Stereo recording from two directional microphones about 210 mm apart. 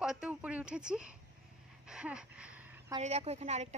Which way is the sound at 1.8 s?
5° right (ahead or behind).